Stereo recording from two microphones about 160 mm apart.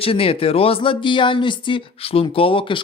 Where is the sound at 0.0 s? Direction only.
35° left (ahead or behind).